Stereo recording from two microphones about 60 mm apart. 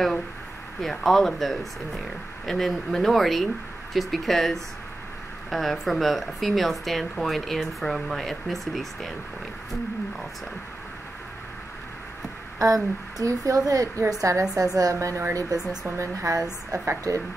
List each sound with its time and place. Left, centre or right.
0.7 s speech: centre
12.5 s a woman's voice: right